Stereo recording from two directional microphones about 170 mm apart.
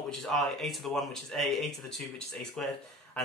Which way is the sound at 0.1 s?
Centre (ahead or behind).